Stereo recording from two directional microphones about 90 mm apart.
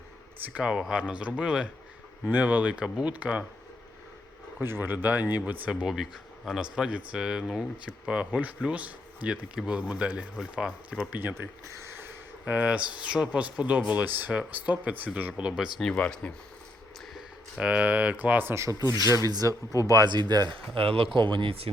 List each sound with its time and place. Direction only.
0.5 s speech: 10° right (ahead or behind)
4.6 s speech: 25° right (ahead or behind)
5.9 s speech: 5° right (ahead or behind)
11.1 s speech: 20° right (ahead or behind)
12.5 s speech: 15° right (ahead or behind)
15.8 s speech: 10° left (ahead or behind)
17.6 s speech: 15° right (ahead or behind); by 20.6 s 50° right (ahead or behind)
20.7 s speech: 90° right